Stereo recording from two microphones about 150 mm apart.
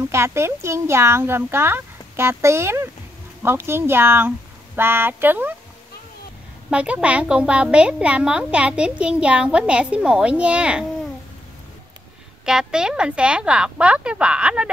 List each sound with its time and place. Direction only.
0.1 s a woman's voice: 15° right (ahead or behind)
6.7 s a woman's voice: 10° right (ahead or behind)
12.4 s a woman's voice: 5° right (ahead or behind)